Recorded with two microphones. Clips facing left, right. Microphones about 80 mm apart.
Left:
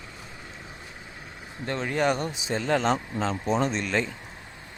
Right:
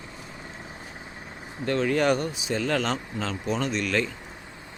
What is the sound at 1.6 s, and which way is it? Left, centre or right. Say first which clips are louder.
Speech: right 3 dB; left.